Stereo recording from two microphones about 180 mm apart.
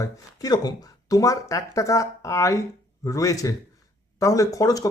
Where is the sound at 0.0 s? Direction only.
20° left (ahead or behind).